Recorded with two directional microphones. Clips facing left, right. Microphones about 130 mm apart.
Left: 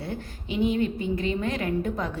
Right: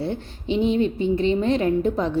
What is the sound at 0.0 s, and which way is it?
A woman's voice, 25° right (ahead or behind).